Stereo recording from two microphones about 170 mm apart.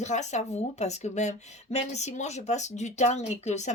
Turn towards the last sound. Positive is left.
turn(degrees=40)  # may be behind; listen again after turning